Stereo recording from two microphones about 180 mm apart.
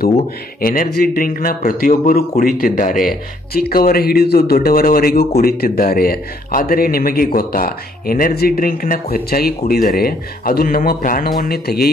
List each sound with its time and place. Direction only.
0.6 s speech: 55° left (ahead or behind)